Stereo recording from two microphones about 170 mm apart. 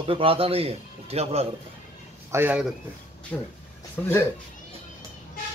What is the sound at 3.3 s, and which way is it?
Speech, 10° left (ahead or behind).